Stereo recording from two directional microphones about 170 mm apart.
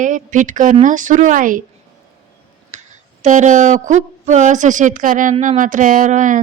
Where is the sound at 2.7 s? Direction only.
45° right (ahead or behind).